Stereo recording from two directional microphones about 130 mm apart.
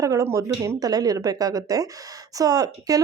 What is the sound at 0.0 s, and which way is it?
A woman's voice, 25° right (ahead or behind).